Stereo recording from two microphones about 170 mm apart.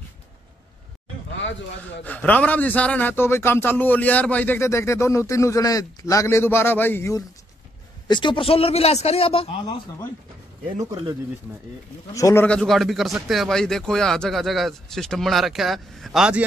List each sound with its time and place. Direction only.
2.0 s a man's voice: 10° left (ahead or behind)
8.1 s a man's voice: 30° left (ahead or behind)
10.8 s speech: 25° right (ahead or behind)
12.1 s a man's voice: 20° left (ahead or behind)
12.4 s speech: centre (ahead or behind)